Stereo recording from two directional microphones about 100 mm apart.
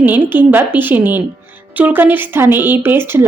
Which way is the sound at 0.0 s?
20° right (ahead or behind).